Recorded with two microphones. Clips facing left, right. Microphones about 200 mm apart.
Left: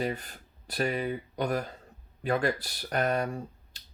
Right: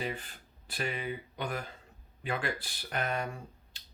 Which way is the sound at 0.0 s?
40° left (ahead or behind).